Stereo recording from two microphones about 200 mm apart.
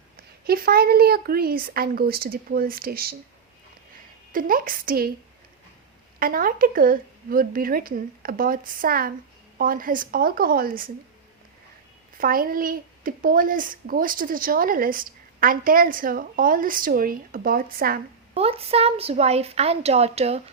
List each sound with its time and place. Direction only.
0.4 s speech: 50° right (ahead or behind)
4.3 s speech: 45° right (ahead or behind)
6.1 s speech: 45° right (ahead or behind)
12.1 s speech: 45° right (ahead or behind)
18.3 s a woman's voice: 30° right (ahead or behind)